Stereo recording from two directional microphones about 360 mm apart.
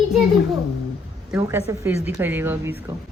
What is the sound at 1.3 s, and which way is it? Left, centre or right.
A woman's voice, centre.